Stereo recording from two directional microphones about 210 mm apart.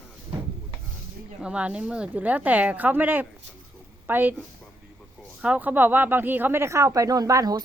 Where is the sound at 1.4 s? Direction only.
5° right (ahead or behind).